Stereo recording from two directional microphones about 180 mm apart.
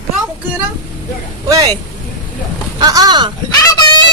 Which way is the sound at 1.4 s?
25° right (ahead or behind).